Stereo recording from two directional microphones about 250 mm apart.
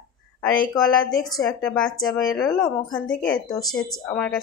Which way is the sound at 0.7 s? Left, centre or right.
Centre.